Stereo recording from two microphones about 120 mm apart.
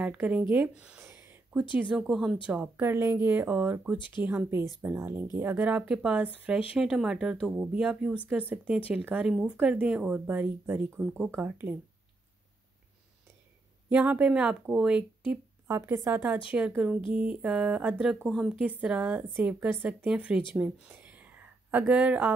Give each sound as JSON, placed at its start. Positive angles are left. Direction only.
{"t": 0.0, "sound": "speech", "side_deg": -15}
{"t": 1.0, "sound": "a sound", "side_deg": -10}
{"t": 1.8, "sound": "speech", "side_deg": -5}
{"t": 13.8, "sound": "speech", "side_deg": -10}
{"t": 15.6, "sound": "speech", "side_deg": -20}
{"t": 20.5, "sound": "a sound", "side_deg": -15}